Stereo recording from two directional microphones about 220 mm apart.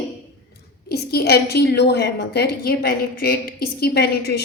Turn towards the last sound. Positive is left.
turn(degrees=45)  # may be behind; listen again after turning